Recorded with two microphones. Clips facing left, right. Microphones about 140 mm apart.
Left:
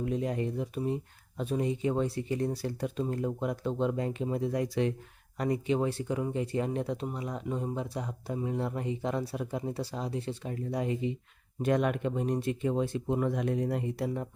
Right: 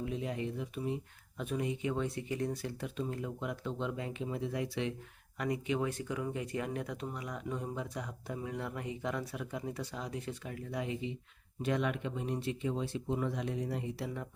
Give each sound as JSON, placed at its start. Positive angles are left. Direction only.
{"t": 0.0, "sound": "speech", "side_deg": 45}